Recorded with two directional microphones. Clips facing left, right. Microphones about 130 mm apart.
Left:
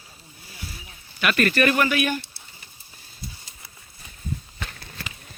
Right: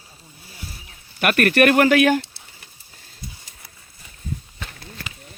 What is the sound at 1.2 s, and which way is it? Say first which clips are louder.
Speech: right 4 dB; 55° right (ahead or behind).